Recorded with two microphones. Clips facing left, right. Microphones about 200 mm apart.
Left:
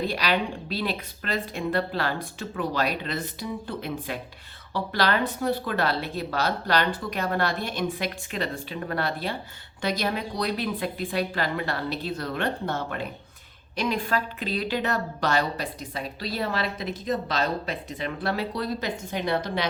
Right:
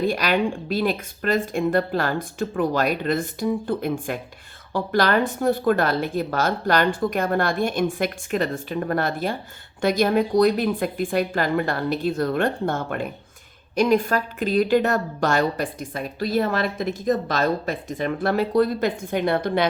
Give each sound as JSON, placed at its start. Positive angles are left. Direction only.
{"t": 0.0, "sound": "a woman's voice", "side_deg": -50}